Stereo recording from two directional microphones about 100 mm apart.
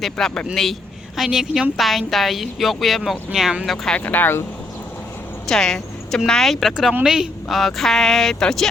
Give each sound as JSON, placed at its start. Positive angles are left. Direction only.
{"t": 0.0, "sound": "a woman's voice", "side_deg": 5}
{"t": 3.7, "sound": "speech", "side_deg": 5}
{"t": 4.0, "sound": "speech", "side_deg": 20}
{"t": 5.5, "sound": "a woman's voice", "side_deg": 5}